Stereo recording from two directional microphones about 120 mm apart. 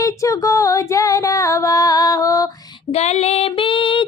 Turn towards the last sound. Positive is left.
turn(degrees=45)  # may be behind; listen again after turning